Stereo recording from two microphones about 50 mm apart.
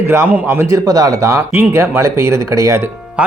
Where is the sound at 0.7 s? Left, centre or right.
Right.